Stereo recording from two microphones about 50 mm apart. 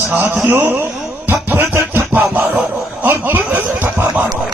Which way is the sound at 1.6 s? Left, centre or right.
Right.